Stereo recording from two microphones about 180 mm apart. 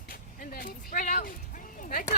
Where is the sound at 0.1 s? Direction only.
50° left (ahead or behind).